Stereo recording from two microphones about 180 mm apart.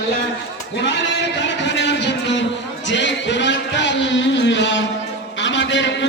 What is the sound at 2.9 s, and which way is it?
Music, 85° left.